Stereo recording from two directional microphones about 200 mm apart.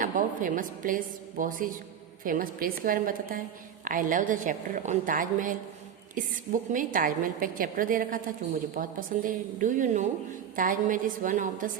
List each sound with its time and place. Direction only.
0.0 s a woman's voice: 40° right (ahead or behind)